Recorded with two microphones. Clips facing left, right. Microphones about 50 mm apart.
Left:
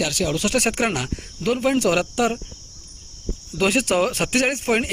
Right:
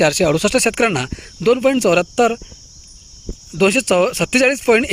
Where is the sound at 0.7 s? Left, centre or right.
Right.